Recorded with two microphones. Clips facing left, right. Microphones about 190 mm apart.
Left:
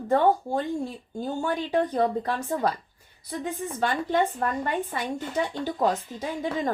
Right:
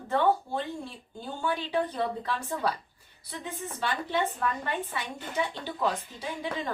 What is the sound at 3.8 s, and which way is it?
Speech, 45° left (ahead or behind).